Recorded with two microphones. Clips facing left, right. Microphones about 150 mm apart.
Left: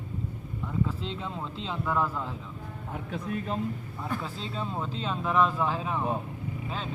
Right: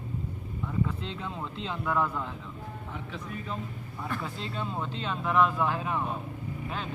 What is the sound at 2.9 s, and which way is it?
Speech, 50° left (ahead or behind).